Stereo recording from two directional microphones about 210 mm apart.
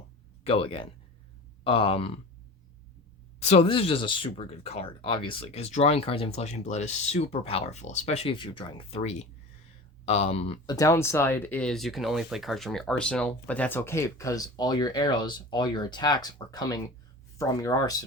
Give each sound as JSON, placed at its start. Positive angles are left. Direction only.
{"t": 0.4, "sound": "speech", "side_deg": 25}
{"t": 3.4, "sound": "speech", "side_deg": 30}